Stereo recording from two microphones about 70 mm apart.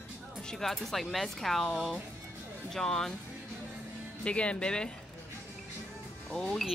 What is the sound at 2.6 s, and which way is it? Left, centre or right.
Speech, centre.